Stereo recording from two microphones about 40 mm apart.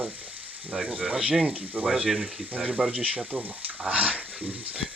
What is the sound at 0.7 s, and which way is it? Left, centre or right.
Speech, centre.